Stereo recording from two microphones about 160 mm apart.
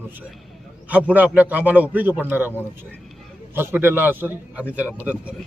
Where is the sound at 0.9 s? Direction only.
10° right (ahead or behind).